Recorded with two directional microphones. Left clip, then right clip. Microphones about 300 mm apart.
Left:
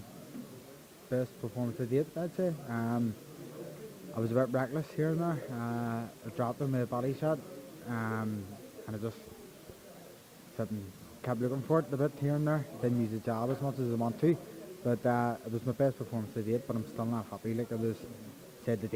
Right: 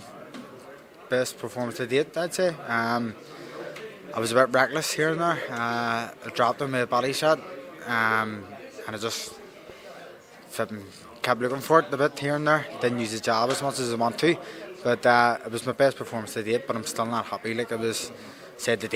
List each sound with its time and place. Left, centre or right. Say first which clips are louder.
1.4 s speech: right 8 dB; centre
4.1 s speech: right 10 dB; centre
10.6 s speech: right 9 dB; centre